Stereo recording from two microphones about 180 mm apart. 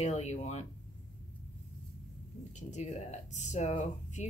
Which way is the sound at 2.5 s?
40° left (ahead or behind).